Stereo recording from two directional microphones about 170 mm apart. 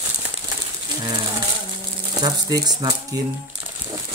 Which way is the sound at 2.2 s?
20° right (ahead or behind).